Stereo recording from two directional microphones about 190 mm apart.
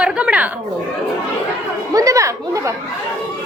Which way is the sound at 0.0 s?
5° right (ahead or behind).